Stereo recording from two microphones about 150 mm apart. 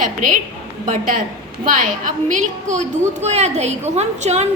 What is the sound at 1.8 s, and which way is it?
A woman's voice, 60° right (ahead or behind).